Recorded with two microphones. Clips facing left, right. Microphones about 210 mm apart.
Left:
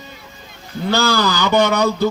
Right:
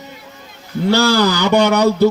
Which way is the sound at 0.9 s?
70° right (ahead or behind).